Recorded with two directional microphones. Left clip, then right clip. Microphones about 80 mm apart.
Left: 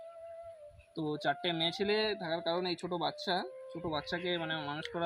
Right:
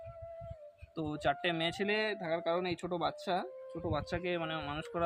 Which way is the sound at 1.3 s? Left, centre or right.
Centre.